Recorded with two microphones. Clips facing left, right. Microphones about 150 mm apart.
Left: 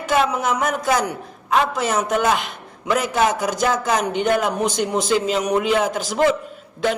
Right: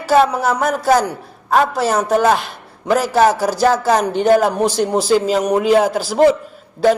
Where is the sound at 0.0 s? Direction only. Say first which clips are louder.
Right 6 dB; 35° right (ahead or behind).